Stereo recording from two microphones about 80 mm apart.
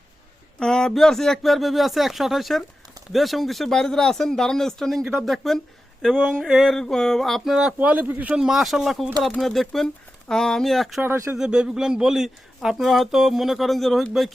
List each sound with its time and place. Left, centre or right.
0.6 s speech: centre
7.8 s speech: centre
8.4 s speech: centre
11.3 s speech: centre